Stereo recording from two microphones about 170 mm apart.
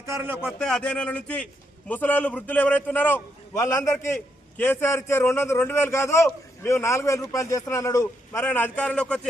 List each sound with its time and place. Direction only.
0.0 s speech: 15° right (ahead or behind)
0.4 s a man's voice: 5° left (ahead or behind)